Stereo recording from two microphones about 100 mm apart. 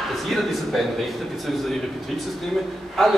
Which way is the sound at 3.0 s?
Centre (ahead or behind).